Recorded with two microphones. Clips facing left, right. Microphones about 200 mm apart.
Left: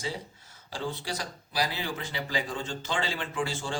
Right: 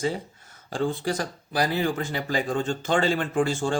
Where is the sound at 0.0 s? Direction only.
50° right (ahead or behind).